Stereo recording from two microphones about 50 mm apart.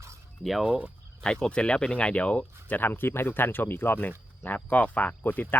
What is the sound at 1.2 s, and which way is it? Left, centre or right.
Speech, centre.